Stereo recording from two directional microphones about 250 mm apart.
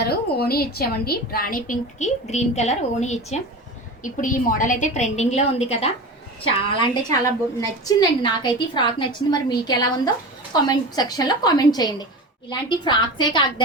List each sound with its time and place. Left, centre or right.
0.0 s a woman's voice: left; by 13.4 s centre